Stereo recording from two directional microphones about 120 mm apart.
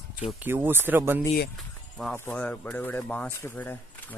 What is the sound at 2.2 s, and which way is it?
Speech, 15° left (ahead or behind).